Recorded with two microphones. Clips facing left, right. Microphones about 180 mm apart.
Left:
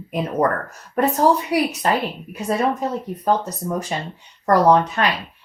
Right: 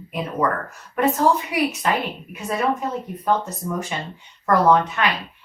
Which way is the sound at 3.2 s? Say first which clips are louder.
Left 1 dB; 40° left (ahead or behind).